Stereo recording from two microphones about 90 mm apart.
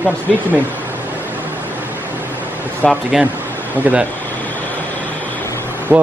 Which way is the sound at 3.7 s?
15° right (ahead or behind).